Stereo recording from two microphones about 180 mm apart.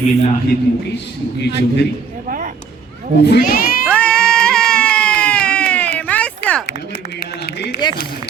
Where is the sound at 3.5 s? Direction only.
55° left (ahead or behind).